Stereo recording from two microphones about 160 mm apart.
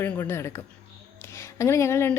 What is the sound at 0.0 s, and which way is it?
A woman's voice, 15° left (ahead or behind).